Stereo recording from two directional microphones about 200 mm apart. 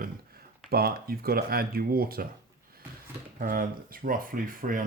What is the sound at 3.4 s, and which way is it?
Speech, 45° right (ahead or behind).